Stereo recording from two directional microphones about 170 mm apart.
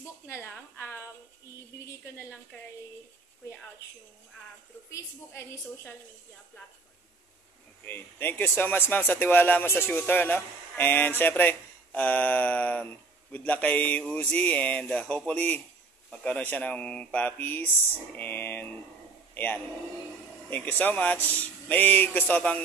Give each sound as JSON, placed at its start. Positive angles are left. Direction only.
{"t": 0.3, "sound": "a sound", "side_deg": 15}
{"t": 1.9, "sound": "a woman's voice", "side_deg": 15}
{"t": 4.9, "sound": "speech", "side_deg": 15}
{"t": 7.8, "sound": "a man's voice", "side_deg": 10}